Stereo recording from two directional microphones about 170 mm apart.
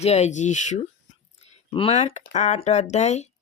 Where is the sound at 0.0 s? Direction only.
40° left (ahead or behind).